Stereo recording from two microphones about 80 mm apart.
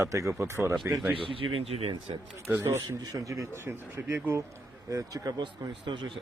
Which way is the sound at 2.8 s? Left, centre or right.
Right.